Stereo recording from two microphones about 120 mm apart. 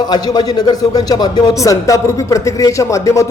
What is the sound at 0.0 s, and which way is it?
A man's voice, 35° left (ahead or behind).